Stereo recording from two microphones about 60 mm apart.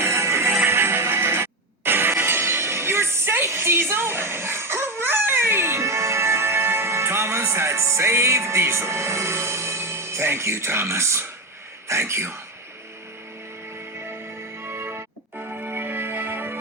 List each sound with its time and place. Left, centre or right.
0.0 s music: right
11.9 s speech: right
14.6 s music: right